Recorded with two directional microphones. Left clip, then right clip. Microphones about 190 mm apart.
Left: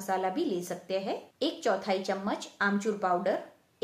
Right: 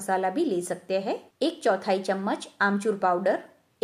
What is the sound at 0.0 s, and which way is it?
A woman's voice, 40° right (ahead or behind).